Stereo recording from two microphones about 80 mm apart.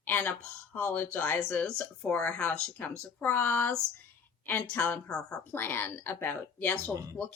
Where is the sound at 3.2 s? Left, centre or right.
Left.